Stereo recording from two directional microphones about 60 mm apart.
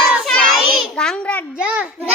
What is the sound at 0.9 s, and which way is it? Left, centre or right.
Child singing, centre.